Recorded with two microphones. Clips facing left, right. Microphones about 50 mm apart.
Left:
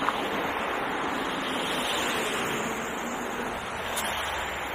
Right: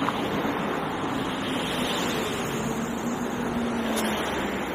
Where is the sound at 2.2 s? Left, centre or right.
Left.